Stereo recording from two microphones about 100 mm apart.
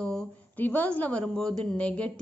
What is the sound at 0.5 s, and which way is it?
A woman's voice, 15° left (ahead or behind).